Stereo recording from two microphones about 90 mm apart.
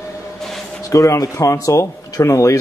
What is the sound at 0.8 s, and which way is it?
A man's voice, 35° left (ahead or behind).